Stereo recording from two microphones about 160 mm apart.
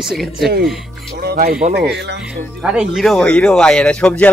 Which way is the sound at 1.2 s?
70° right (ahead or behind).